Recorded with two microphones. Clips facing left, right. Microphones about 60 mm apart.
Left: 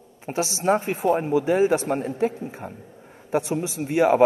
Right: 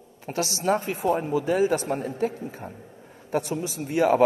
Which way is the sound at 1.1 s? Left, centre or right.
Left.